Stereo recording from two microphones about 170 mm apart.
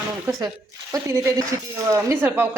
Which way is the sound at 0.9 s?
15° right (ahead or behind).